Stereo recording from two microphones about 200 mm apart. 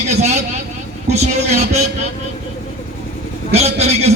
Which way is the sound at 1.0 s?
35° right (ahead or behind).